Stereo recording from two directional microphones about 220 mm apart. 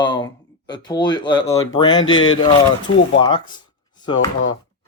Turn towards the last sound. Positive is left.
turn(degrees=20)  # may be behind; listen again after turning